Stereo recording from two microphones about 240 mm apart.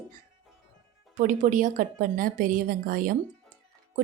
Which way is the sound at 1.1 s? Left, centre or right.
Right.